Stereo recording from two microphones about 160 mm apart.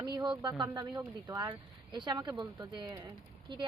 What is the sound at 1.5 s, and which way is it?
Speech, 30° right (ahead or behind).